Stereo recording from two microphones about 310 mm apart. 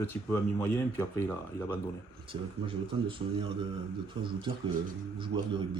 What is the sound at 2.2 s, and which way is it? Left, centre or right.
Speech, centre.